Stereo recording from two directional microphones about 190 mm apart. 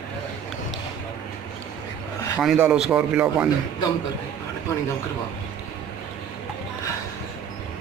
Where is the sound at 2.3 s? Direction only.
5° right (ahead or behind).